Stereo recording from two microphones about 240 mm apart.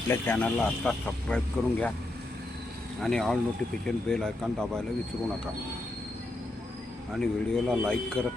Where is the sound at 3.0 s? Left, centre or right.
Centre.